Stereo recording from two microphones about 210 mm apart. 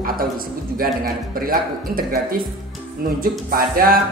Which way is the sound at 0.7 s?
45° right (ahead or behind).